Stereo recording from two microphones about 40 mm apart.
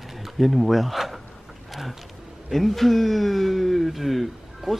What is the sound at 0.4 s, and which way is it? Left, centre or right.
Speech, centre.